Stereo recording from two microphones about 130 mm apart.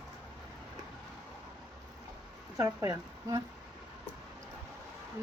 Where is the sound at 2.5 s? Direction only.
25° right (ahead or behind).